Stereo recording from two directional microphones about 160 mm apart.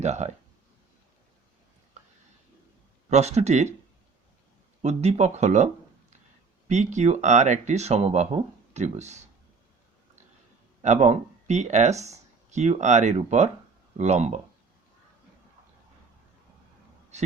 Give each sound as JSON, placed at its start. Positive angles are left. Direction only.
{"t": 0.0, "sound": "speech", "side_deg": -45}
{"t": 3.1, "sound": "speech", "side_deg": -45}
{"t": 4.8, "sound": "speech", "side_deg": -45}
{"t": 10.8, "sound": "speech", "side_deg": -45}
{"t": 17.1, "sound": "a sound", "side_deg": -45}